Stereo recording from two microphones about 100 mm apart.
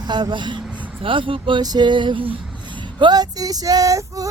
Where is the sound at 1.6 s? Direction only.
45° right (ahead or behind); by 2.4 s 60° right (ahead or behind).